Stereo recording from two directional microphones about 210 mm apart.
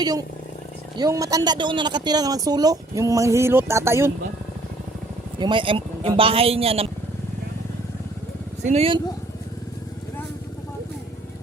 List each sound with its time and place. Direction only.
0.0 s speech: 15° right (ahead or behind)
5.4 s speech: 25° right (ahead or behind)
8.6 s speech: 30° right (ahead or behind)